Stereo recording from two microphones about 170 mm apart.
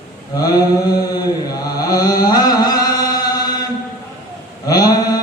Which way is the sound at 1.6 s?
20° left (ahead or behind).